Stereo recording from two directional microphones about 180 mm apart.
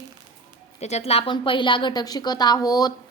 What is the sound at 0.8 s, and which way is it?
A woman's voice, 40° left (ahead or behind).